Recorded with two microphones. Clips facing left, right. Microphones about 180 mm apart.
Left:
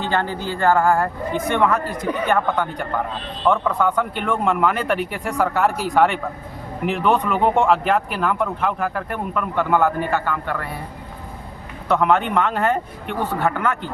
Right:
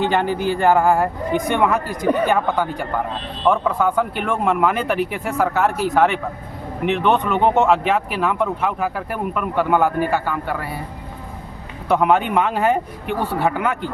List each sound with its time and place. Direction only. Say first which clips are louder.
0.0 s speech: right 4 dB; 15° right (ahead or behind)
11.9 s speech: right 1 dB; 10° right (ahead or behind)